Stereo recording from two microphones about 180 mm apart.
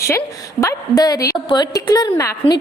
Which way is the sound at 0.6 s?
15° left (ahead or behind).